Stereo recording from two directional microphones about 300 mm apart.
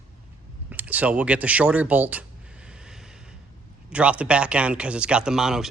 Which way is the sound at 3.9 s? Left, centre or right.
Centre.